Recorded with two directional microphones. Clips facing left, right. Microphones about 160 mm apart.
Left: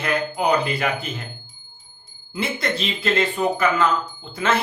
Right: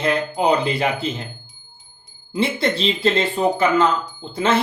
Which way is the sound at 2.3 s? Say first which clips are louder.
Right 5 dB; 30° right (ahead or behind).